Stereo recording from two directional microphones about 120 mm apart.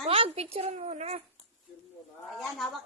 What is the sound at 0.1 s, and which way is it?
A woman's voice, 55° right (ahead or behind).